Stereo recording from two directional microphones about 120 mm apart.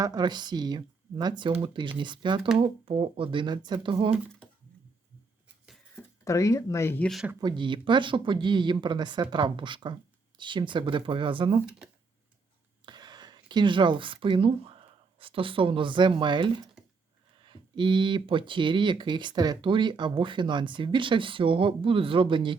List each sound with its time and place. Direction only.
0.0 s speech: 35° right (ahead or behind)
6.2 s speech: 25° left (ahead or behind)
7.0 s speech: centre (ahead or behind)
7.4 s speech: 40° right (ahead or behind)
12.8 s speech: 35° right (ahead or behind)